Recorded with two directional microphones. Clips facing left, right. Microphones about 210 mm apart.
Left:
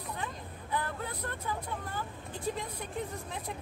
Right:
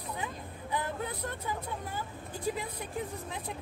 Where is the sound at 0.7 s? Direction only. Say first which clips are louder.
Right 1 dB; 15° right (ahead or behind).